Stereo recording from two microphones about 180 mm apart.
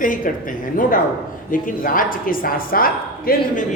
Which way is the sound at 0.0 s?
50° left (ahead or behind).